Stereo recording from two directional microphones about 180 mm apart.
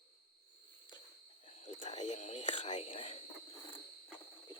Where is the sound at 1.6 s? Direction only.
40° left (ahead or behind).